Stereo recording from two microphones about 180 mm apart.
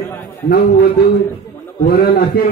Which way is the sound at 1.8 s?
55° left (ahead or behind).